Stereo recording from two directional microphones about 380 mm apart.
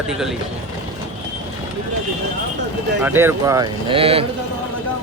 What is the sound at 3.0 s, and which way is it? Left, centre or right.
Speech, centre.